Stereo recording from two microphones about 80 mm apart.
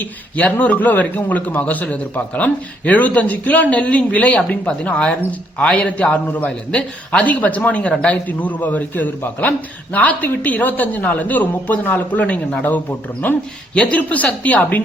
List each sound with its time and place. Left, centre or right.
0.0 s a man's voice: left